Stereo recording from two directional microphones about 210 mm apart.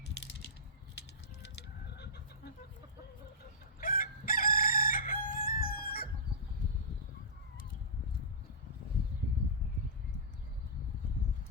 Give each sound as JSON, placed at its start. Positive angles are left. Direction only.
{"t": 1.5, "sound": "goat", "side_deg": 50}
{"t": 3.8, "sound": "crowing", "side_deg": 40}